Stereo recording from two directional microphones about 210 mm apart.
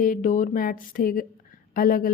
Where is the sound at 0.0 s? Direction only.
40° left (ahead or behind).